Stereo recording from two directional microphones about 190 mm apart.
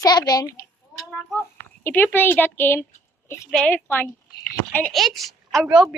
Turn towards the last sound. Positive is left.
turn(degrees=-5)  # may be behind; listen again after turning